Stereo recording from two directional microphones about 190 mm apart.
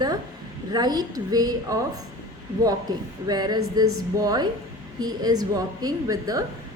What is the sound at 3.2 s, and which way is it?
A woman's voice, 20° right (ahead or behind).